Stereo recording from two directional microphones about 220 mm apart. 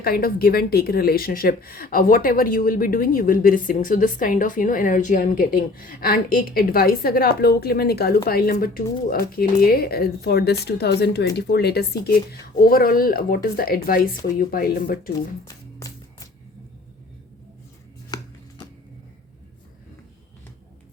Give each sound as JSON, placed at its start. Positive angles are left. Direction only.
{"t": 0.0, "sound": "a woman's voice", "side_deg": 40}
{"t": 15.4, "sound": "music", "side_deg": 15}
{"t": 18.1, "sound": "a sound", "side_deg": 20}